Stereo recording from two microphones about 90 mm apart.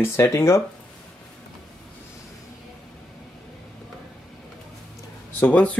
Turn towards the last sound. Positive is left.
turn(degrees=15)  # may be behind; listen again after turning